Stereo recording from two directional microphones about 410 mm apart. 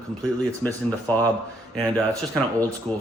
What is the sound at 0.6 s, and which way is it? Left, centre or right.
Speech, centre.